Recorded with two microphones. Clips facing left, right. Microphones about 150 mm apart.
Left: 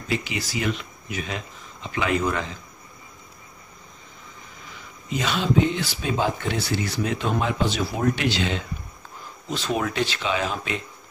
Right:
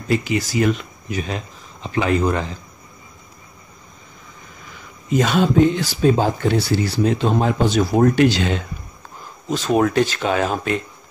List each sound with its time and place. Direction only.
0.2 s speech: 45° right (ahead or behind)
5.1 s speech: 45° right (ahead or behind)